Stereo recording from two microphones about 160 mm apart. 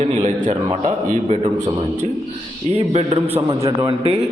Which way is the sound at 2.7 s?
35° right (ahead or behind).